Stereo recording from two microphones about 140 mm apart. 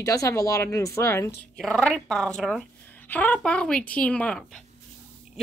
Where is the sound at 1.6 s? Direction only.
5° left (ahead or behind).